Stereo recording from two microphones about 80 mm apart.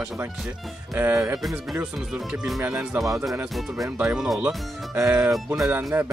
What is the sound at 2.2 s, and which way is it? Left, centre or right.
Music, centre.